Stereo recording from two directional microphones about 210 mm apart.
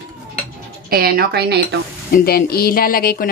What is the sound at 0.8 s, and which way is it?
Speech, 45° right (ahead or behind).